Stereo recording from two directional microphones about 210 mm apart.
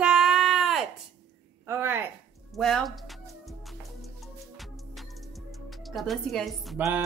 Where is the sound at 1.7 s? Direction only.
10° right (ahead or behind).